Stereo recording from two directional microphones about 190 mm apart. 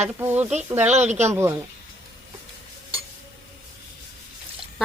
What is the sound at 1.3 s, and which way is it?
Speech, 15° right (ahead or behind).